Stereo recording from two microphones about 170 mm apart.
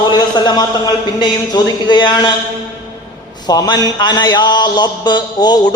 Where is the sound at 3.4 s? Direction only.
25° left (ahead or behind).